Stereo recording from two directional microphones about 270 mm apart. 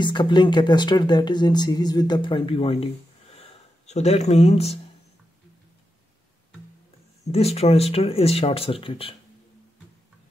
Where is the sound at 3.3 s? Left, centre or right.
Left.